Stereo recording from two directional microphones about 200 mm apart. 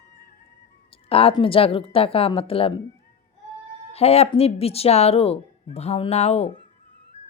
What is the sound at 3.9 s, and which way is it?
A woman's voice, 30° left (ahead or behind).